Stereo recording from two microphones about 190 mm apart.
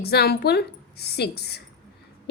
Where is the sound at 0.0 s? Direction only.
55° left (ahead or behind).